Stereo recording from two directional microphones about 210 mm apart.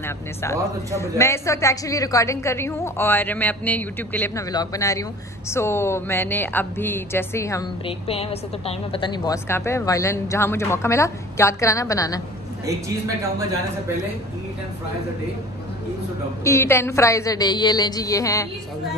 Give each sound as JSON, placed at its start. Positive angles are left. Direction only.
{"t": 0.0, "sound": "a woman's voice", "side_deg": 10}
{"t": 7.8, "sound": "a woman's voice", "side_deg": 25}
{"t": 12.6, "sound": "speech", "side_deg": -15}
{"t": 16.4, "sound": "a woman's voice", "side_deg": 10}